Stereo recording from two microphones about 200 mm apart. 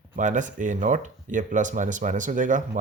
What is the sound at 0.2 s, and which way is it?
Speech, 40° right (ahead or behind).